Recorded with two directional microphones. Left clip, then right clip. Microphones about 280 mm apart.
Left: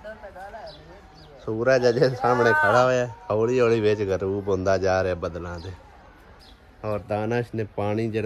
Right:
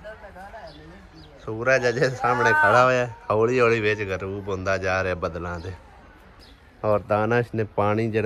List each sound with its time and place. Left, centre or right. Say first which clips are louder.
1.4 s speech: left 1 dB; centre
6.8 s speech: right 6 dB; centre